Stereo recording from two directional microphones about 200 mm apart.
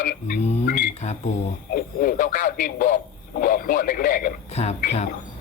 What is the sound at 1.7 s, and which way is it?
Radio, 45° left (ahead or behind).